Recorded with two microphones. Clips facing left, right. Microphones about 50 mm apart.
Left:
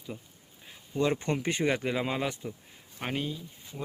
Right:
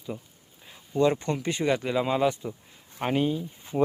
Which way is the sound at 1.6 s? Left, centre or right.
Centre.